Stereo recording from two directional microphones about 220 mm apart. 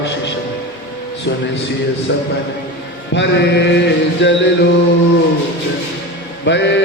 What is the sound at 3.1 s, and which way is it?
Music, 50° left (ahead or behind).